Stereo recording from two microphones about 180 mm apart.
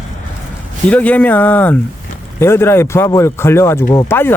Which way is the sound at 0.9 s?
10° left (ahead or behind).